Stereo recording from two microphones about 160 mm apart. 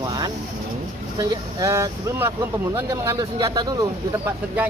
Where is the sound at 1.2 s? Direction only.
25° right (ahead or behind).